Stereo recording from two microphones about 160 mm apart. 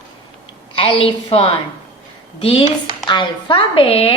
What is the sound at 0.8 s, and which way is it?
A woman's voice, 35° left (ahead or behind).